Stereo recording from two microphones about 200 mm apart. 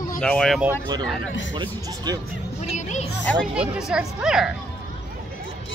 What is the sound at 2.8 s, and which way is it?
Speech, 35° left (ahead or behind).